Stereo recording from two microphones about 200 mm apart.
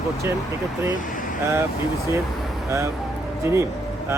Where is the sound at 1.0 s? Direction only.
40° left (ahead or behind).